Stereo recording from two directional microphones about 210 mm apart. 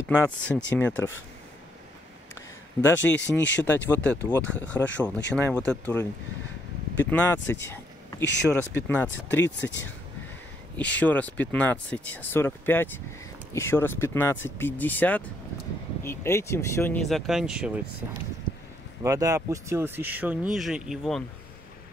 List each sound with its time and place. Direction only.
0.1 s speech: 10° left (ahead or behind)
2.8 s speech: 10° left (ahead or behind)
3.3 s speech: 60° left (ahead or behind)
3.6 s speech: 10° left (ahead or behind)
7.4 s a sound: 10° left (ahead or behind)
8.2 s speech: 55° left (ahead or behind)
8.7 s speech: 10° left (ahead or behind)
10.8 s speech: 5° left (ahead or behind)
17.0 s speech: centre (ahead or behind)
19.0 s speech: 15° right (ahead or behind)